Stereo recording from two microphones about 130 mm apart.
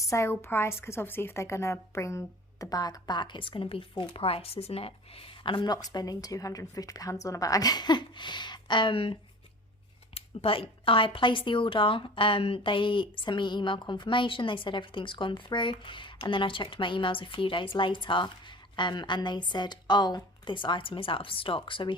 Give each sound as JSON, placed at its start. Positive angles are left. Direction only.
{"t": 0.0, "sound": "a woman's voice", "side_deg": 25}
{"t": 10.2, "sound": "a woman's voice", "side_deg": 45}